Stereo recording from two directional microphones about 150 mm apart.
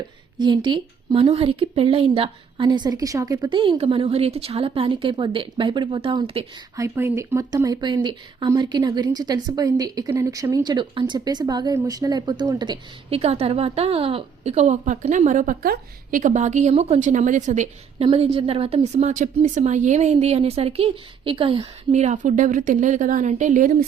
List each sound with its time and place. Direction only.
0.3 s a woman's voice: 30° right (ahead or behind)
6.7 s a woman's voice: 20° right (ahead or behind); by 17.7 s 55° right (ahead or behind)
18.0 s a woman's voice: 40° right (ahead or behind)
21.9 s a woman's voice: 55° right (ahead or behind)